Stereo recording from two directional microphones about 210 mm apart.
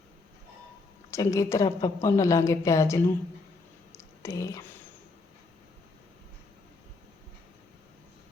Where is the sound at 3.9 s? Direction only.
15° left (ahead or behind).